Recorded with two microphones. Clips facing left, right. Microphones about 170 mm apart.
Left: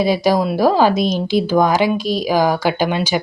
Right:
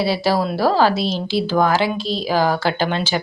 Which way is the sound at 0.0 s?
15° left (ahead or behind).